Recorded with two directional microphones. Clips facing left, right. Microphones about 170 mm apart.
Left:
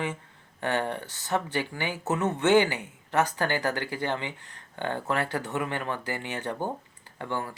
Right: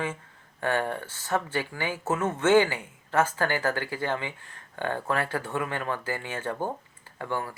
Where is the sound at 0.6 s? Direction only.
25° left (ahead or behind).